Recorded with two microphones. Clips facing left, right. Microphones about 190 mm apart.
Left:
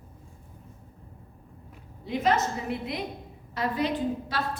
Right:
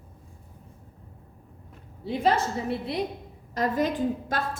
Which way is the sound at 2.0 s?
35° right (ahead or behind).